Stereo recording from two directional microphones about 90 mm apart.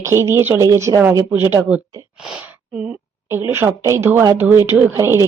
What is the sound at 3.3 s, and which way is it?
Speech, 25° right (ahead or behind).